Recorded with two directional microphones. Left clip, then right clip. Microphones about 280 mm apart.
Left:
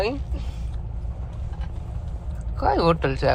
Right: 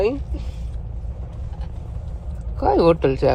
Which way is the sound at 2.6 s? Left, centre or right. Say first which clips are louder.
Right 4 dB; centre.